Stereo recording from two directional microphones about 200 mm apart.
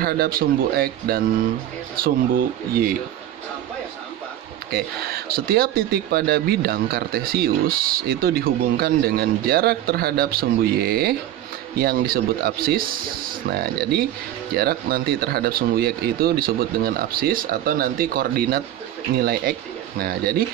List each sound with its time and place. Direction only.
0.0 s speech: 50° right (ahead or behind)
4.6 s speech: 50° right (ahead or behind)